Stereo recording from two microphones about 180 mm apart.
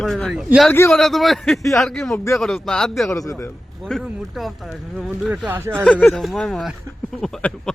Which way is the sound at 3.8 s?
Centre (ahead or behind).